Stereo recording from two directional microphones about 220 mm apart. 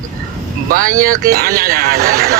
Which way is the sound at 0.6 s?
40° right (ahead or behind).